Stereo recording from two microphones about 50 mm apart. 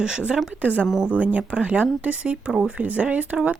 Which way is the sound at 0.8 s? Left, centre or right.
Centre.